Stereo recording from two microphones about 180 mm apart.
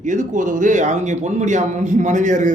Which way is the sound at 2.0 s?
40° right (ahead or behind).